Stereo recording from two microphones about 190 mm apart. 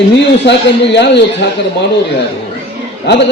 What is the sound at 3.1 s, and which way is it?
Speech, 65° left (ahead or behind).